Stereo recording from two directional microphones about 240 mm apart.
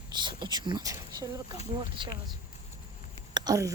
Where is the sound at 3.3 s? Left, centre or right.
Centre.